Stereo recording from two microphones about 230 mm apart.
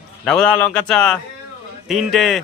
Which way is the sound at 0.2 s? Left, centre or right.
Centre.